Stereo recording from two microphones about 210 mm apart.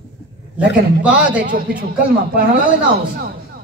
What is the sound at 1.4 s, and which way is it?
A man's voice, 40° right (ahead or behind).